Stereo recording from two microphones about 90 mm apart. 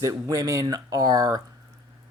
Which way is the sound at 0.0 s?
40° right (ahead or behind).